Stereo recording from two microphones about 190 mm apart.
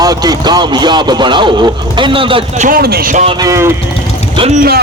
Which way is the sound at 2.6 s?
50° right (ahead or behind).